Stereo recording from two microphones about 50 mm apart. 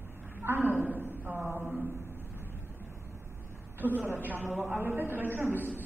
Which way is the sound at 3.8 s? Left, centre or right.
Right.